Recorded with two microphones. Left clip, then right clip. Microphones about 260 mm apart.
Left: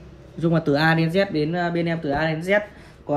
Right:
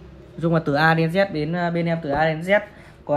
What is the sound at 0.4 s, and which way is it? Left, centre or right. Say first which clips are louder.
Speech: right 1 dB; right.